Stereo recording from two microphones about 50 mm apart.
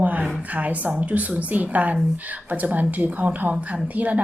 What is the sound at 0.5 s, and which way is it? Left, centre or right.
A woman's voice, right.